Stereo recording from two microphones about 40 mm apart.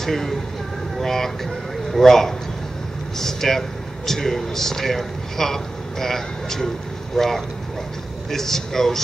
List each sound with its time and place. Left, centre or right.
0.0 s speech: centre
0.9 s a sound: centre
3.2 s speech: centre